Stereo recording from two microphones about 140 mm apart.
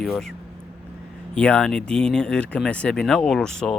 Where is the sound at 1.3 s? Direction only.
5° left (ahead or behind).